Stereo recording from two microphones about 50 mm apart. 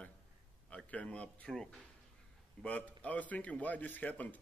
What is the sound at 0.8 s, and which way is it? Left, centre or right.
Speech, left.